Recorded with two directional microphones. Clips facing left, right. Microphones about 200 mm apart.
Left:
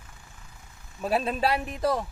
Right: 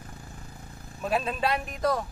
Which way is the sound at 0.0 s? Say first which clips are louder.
Right 8 dB; 40° right (ahead or behind).